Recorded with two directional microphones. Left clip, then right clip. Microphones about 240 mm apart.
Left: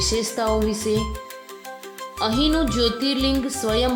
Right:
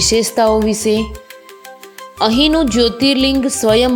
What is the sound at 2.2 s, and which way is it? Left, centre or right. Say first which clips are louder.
Speech: right 8 dB; right.